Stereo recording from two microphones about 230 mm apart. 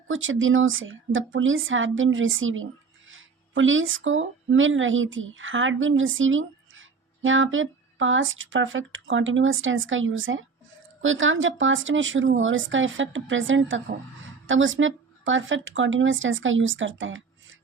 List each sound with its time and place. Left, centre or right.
0.1 s speech: right